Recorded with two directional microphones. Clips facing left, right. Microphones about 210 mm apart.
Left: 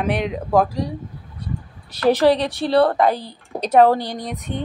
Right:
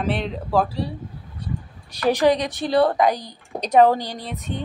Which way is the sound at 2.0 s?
15° right (ahead or behind).